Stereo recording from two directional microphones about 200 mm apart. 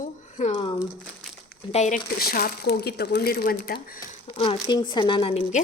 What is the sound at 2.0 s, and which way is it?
Speech, 50° left (ahead or behind).